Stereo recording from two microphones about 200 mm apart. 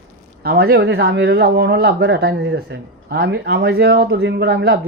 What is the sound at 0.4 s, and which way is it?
Speech, 50° right (ahead or behind).